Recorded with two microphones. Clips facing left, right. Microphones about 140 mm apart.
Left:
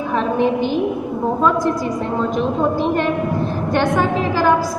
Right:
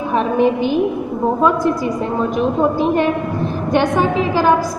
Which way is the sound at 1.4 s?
10° right (ahead or behind).